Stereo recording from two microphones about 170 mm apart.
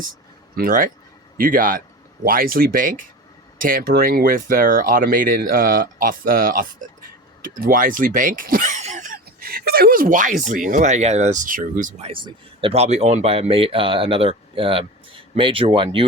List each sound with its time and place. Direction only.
0.5 s a man's voice: 55° right (ahead or behind)
12.0 s speech: 30° right (ahead or behind)